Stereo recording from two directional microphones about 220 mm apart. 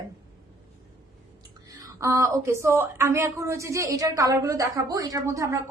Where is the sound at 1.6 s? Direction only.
15° right (ahead or behind).